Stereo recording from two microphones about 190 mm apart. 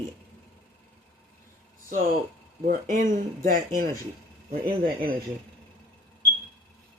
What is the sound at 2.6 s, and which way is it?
Speech, 45° right (ahead or behind).